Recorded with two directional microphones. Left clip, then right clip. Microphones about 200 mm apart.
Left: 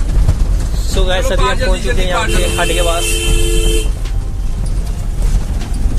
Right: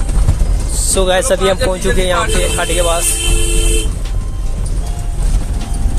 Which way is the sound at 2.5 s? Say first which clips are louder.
Left 2 dB; 10° right (ahead or behind).